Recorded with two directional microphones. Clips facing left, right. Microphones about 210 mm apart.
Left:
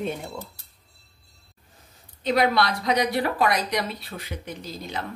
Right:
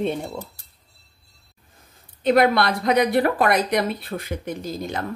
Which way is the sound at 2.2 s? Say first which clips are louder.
Right 4 dB; 55° right (ahead or behind).